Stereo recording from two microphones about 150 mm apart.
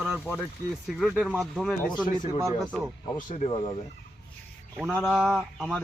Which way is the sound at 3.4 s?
35° left (ahead or behind).